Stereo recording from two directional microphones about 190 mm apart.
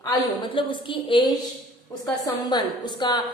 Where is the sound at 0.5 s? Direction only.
25° left (ahead or behind).